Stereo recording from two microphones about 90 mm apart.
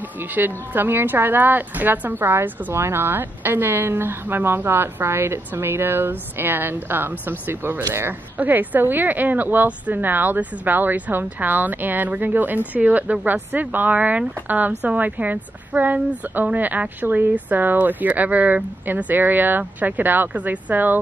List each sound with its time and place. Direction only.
0.3 s speech: 20° right (ahead or behind)